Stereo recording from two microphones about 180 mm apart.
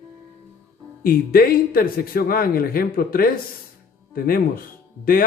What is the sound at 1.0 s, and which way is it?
A man's voice, 55° left (ahead or behind).